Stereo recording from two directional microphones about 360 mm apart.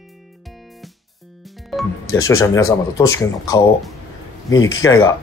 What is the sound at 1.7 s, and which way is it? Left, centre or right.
Music, centre.